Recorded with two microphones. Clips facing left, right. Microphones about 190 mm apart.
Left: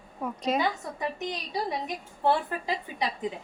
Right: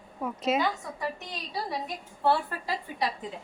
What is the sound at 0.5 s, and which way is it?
A woman's voice, 15° left (ahead or behind).